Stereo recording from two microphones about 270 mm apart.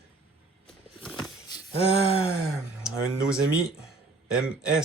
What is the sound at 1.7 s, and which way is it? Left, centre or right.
Speech, left.